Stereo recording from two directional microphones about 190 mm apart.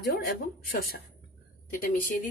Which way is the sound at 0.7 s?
50° left (ahead or behind).